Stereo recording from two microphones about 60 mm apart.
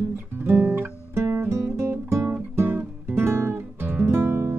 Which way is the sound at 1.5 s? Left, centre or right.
Right.